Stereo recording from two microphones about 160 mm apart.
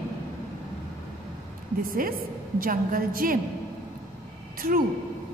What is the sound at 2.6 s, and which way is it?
Speech, 60° right (ahead or behind).